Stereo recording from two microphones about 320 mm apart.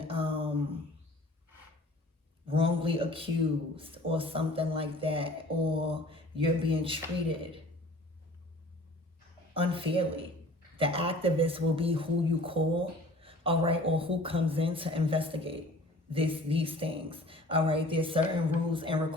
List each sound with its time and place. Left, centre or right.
0.0 s a sound: centre
2.5 s a man's voice: centre
9.6 s speech: centre